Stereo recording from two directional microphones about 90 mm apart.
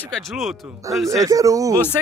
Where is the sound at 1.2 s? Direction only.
40° right (ahead or behind).